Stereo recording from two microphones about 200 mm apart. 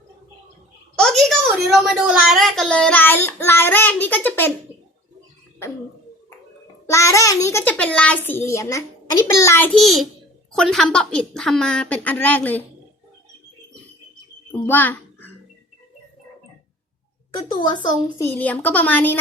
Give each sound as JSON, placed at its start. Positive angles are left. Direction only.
{"t": 0.9, "sound": "a woman's voice", "side_deg": 0}
{"t": 6.8, "sound": "a child's voice", "side_deg": 15}
{"t": 14.5, "sound": "a sound", "side_deg": 10}
{"t": 17.3, "sound": "speech", "side_deg": 20}
{"t": 18.3, "sound": "a woman's voice", "side_deg": 10}